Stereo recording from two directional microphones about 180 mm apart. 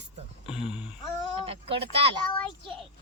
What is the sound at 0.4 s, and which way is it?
Speech, 5° right (ahead or behind).